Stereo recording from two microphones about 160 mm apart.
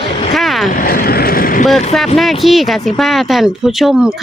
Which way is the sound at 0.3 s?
Centre (ahead or behind).